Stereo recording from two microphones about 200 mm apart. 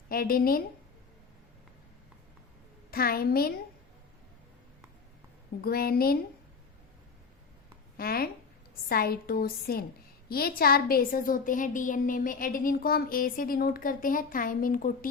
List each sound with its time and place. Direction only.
0.1 s a woman's voice: 45° left (ahead or behind)
2.9 s a woman's voice: 50° left (ahead or behind)
5.6 s a woman's voice: 50° left (ahead or behind)
7.9 s a woman's voice: 50° left (ahead or behind)